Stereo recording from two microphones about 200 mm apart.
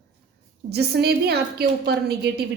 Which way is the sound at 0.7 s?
55° right (ahead or behind).